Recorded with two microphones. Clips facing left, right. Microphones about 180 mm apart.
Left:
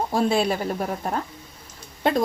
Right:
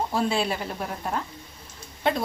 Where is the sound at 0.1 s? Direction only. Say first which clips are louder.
Left 4 dB; 45° left (ahead or behind).